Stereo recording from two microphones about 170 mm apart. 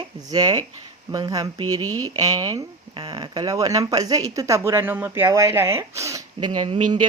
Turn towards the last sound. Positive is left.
turn(degrees=-25)  # may be behind; listen again after turning